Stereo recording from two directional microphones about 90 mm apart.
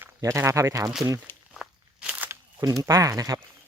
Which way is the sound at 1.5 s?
10° right (ahead or behind).